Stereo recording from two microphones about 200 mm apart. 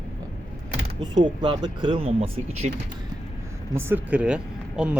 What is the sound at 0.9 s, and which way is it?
Speech, 25° right (ahead or behind).